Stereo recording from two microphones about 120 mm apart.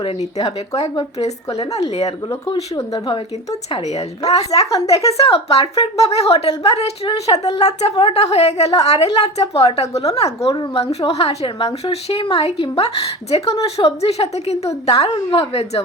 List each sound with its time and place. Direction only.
0.3 s speech: 30° left (ahead or behind)
4.3 s a woman's voice: 60° left (ahead or behind)
9.9 s speech: 30° left (ahead or behind)
10.2 s a woman's voice: 60° left (ahead or behind)
14.7 s speech: 30° left (ahead or behind)
15.1 s a woman's voice: 50° left (ahead or behind)